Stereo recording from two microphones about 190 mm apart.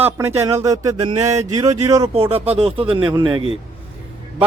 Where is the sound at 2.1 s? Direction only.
30° right (ahead or behind).